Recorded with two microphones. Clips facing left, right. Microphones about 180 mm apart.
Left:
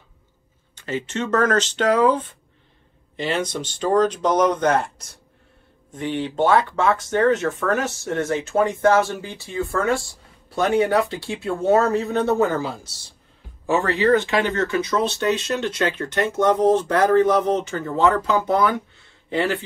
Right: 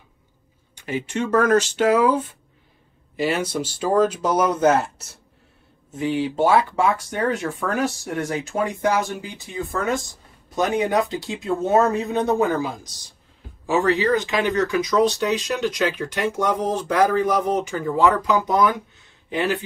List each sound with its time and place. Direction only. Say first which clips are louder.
0.7 s speech: right 1 dB; 10° right (ahead or behind)